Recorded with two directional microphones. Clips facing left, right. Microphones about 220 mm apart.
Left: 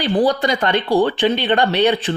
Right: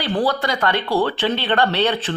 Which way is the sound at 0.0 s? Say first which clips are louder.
Left 4 dB; 15° left (ahead or behind).